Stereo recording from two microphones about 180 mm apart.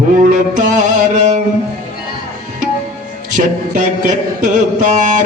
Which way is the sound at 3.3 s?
45° right (ahead or behind).